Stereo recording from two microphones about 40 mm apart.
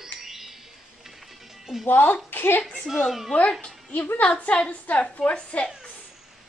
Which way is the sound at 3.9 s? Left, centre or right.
Left.